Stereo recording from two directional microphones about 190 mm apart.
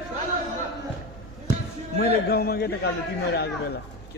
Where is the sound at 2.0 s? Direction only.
55° left (ahead or behind).